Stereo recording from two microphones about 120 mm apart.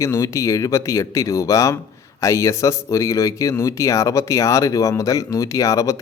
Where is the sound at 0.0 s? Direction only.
25° left (ahead or behind).